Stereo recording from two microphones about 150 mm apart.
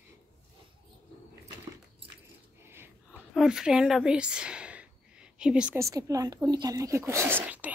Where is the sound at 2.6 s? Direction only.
15° right (ahead or behind).